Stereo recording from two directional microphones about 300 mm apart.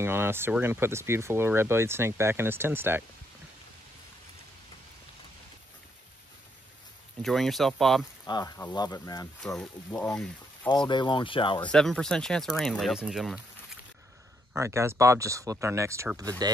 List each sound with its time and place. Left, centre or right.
0.0 s speech: centre
7.2 s speech: centre
8.3 s speech: centre
10.9 s speech: centre
11.7 s speech: centre
14.5 s speech: centre